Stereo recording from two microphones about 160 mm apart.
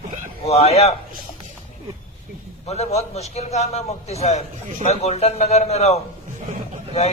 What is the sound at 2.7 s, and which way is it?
A man's voice, 45° left (ahead or behind).